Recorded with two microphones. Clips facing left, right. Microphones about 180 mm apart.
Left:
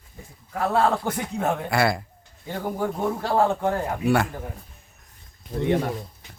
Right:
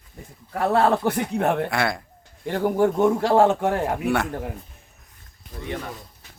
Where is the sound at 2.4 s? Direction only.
80° right.